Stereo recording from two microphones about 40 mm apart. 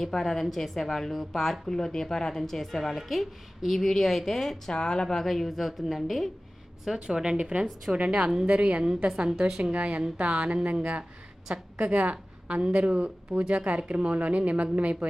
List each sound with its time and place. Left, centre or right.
0.0 s a woman's voice: centre
4.7 s a woman's voice: left
5.0 s a woman's voice: centre
6.8 s a woman's voice: centre
7.3 s a woman's voice: right
9.7 s a woman's voice: right